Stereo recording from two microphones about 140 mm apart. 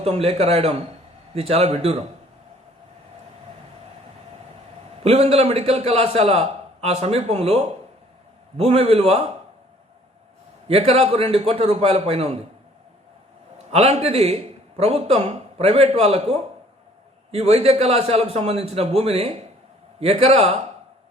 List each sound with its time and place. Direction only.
0.0 s a man's voice: 45° right (ahead or behind)
5.0 s a man's voice: 45° right (ahead or behind)
10.7 s a man's voice: 45° right (ahead or behind)
13.7 s a man's voice: 50° right (ahead or behind)